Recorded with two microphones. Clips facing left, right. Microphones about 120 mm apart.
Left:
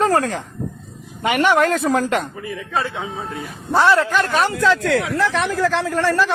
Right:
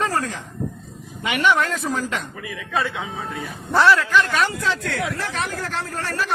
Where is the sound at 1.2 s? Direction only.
50° left (ahead or behind).